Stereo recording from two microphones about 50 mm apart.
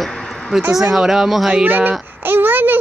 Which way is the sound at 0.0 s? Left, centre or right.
Centre.